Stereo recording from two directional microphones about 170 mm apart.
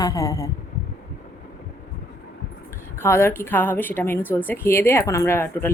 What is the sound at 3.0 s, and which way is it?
A woman's voice, 15° left (ahead or behind).